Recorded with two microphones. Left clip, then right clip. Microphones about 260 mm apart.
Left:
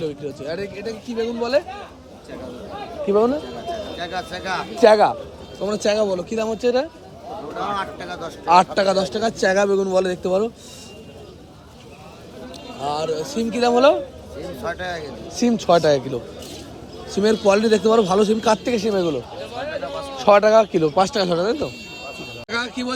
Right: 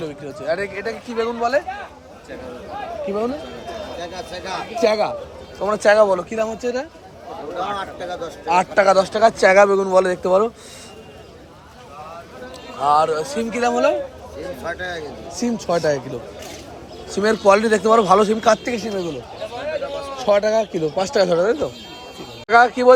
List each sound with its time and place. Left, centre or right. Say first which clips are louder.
0.0 s a man's voice: even; centre
4.3 s a man's voice: left 1 dB; centre
7.5 s speech: even; left
8.4 s a man's voice: even; centre
12.8 s a man's voice: right 7 dB; centre
15.4 s a man's voice: left 4 dB; centre